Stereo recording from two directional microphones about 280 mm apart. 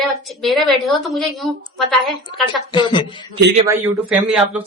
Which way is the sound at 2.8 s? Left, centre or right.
Centre.